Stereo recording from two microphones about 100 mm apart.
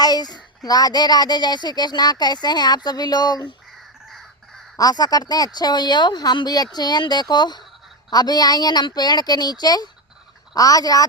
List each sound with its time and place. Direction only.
0.0 s a child's voice: 40° left (ahead or behind)
4.8 s a child's voice: 40° left (ahead or behind)